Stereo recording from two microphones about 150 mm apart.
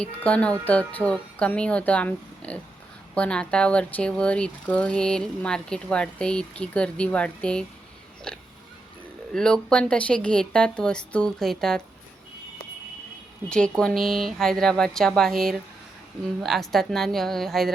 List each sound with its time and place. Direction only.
0.0 s speech: 10° left (ahead or behind)
8.3 s pig: 5° left (ahead or behind)
9.3 s speech: 5° left (ahead or behind)
13.5 s speech: 5° left (ahead or behind)